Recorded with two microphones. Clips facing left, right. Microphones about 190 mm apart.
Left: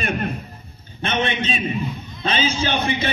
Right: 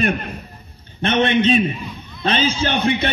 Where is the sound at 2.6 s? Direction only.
60° right (ahead or behind).